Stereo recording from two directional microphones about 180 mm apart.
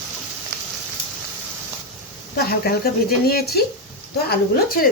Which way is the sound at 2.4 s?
55° left (ahead or behind).